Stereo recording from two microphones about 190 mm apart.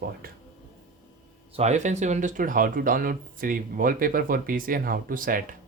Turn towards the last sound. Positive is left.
turn(degrees=-45)  # may be behind; listen again after turning